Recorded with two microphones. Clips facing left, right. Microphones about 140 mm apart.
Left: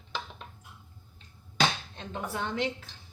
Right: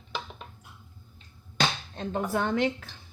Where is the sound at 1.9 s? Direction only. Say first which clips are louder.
Right 7 dB; 40° right (ahead or behind).